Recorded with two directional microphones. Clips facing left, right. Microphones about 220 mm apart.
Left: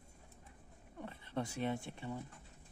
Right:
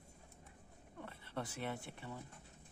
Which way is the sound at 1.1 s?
20° left (ahead or behind).